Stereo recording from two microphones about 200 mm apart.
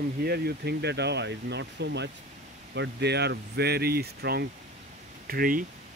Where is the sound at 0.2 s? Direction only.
50° right (ahead or behind).